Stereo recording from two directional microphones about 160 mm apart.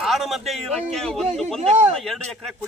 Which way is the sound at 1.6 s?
45° right (ahead or behind).